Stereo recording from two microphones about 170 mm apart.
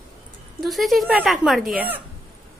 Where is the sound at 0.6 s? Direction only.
Centre (ahead or behind).